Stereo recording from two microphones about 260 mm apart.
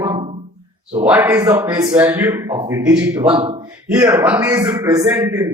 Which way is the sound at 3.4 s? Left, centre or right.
Centre.